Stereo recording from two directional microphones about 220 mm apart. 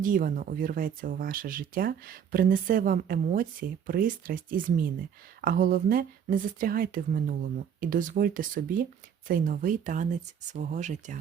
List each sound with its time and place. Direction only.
0.0 s speech: 40° right (ahead or behind)